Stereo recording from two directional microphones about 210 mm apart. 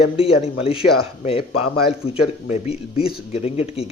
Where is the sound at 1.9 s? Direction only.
30° left (ahead or behind).